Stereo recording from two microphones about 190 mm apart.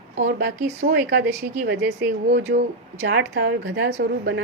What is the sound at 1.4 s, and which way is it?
A woman's voice, 65° right (ahead or behind).